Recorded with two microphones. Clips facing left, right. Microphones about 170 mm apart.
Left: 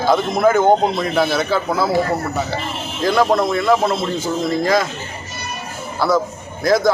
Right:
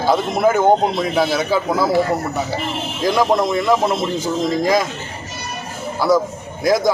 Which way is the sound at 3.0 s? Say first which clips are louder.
Left 1 dB; 15° right (ahead or behind).